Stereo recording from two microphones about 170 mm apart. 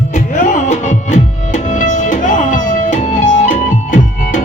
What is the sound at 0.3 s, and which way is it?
Music, 50° left (ahead or behind).